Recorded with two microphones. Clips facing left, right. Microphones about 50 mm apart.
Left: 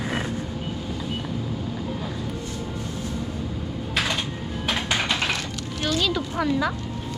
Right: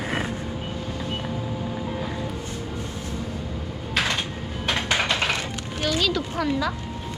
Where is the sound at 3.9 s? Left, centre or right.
Centre.